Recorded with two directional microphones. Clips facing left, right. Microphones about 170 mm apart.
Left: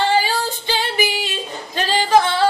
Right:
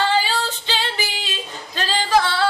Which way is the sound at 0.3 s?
15° left (ahead or behind).